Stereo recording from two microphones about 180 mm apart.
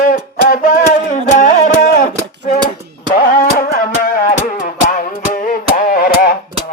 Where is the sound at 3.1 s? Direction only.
55° left (ahead or behind).